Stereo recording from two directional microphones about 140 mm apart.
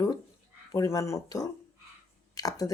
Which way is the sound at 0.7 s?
20° left (ahead or behind).